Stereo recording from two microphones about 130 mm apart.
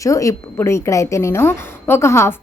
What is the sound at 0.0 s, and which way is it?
A woman's voice, 25° left (ahead or behind).